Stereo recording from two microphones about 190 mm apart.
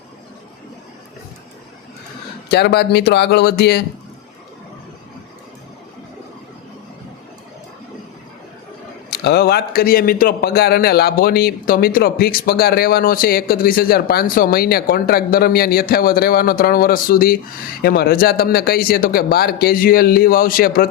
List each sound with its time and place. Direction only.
2.5 s speech: 60° left (ahead or behind)
9.0 s a man's voice: 55° left (ahead or behind)